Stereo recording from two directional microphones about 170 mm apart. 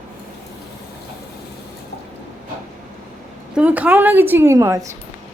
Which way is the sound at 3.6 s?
10° right (ahead or behind).